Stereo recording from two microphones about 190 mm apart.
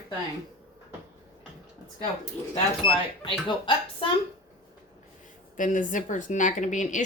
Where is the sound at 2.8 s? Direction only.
25° left (ahead or behind).